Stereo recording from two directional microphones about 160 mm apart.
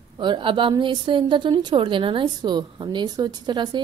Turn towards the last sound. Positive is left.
turn(degrees=-30)  # may be behind; listen again after turning